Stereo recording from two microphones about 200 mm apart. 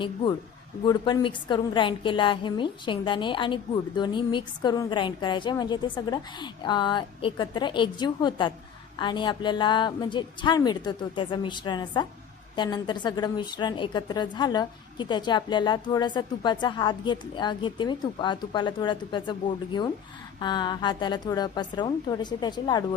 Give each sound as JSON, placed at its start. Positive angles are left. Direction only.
{"t": 0.9, "sound": "a woman's voice", "side_deg": 20}